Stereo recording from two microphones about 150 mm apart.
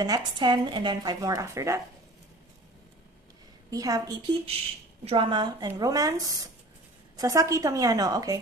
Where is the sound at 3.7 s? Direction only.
25° right (ahead or behind).